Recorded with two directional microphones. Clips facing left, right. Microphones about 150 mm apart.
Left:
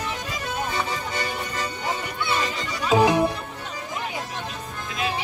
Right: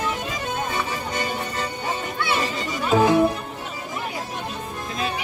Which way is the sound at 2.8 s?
15° left (ahead or behind).